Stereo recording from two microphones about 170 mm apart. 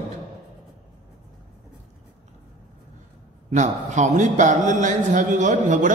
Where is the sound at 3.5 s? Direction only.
45° right (ahead or behind).